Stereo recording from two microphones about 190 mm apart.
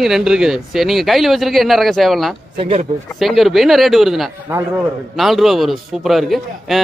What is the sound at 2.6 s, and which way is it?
Speech, 30° right (ahead or behind).